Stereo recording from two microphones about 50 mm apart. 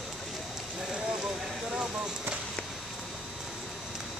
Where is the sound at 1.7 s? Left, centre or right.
Centre.